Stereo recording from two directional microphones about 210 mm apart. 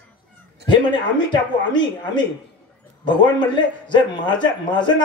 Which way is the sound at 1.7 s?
20° left (ahead or behind).